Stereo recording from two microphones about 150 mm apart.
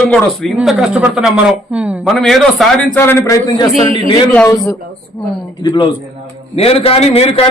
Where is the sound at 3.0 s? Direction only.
20° left (ahead or behind).